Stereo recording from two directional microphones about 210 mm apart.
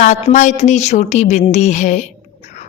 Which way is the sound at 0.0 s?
35° left (ahead or behind).